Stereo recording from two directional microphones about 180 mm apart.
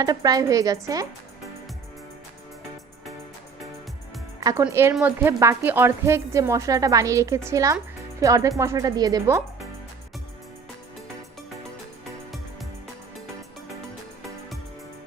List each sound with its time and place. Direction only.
0.0 s speech: 20° right (ahead or behind)
4.4 s music: 20° right (ahead or behind)
4.6 s speech: 15° right (ahead or behind)